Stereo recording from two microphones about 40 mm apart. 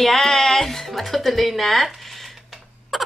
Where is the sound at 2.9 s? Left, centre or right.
Centre.